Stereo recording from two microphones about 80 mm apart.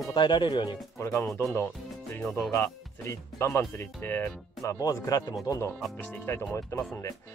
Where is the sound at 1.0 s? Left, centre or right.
Left.